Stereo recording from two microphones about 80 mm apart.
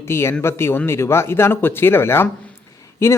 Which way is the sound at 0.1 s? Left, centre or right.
Left.